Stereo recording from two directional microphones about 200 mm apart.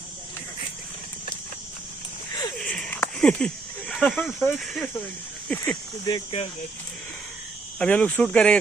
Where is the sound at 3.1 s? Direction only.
5° left (ahead or behind).